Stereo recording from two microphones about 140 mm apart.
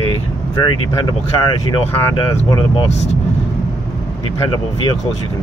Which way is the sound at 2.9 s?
50° left (ahead or behind).